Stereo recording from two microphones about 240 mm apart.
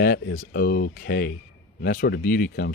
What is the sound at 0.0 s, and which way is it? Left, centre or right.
Speech, left.